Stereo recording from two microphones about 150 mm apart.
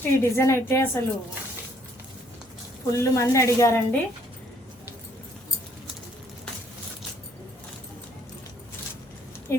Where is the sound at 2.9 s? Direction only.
20° left (ahead or behind).